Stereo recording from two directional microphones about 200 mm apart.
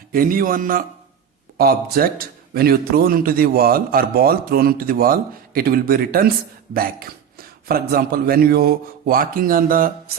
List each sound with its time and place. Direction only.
0.1 s a man's voice: 45° right (ahead or behind)